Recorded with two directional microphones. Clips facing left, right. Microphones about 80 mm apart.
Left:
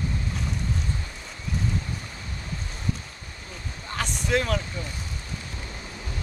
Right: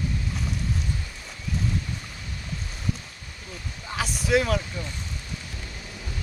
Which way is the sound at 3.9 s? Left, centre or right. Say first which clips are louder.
Right 2 dB; centre.